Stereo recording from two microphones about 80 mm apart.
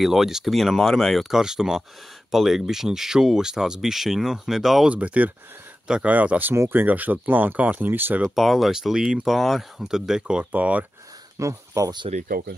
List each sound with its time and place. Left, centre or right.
0.0 s speech: centre
1.4 s speech: centre
4.8 s speech: centre
8.4 s speech: centre
11.3 s speech: right